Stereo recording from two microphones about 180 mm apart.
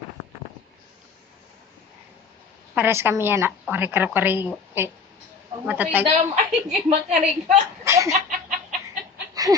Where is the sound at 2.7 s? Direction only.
15° right (ahead or behind).